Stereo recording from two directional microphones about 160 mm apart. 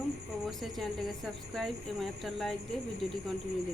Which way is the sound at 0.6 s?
Centre (ahead or behind).